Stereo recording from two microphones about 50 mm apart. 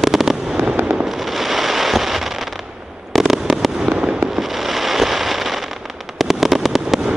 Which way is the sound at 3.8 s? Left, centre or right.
Centre.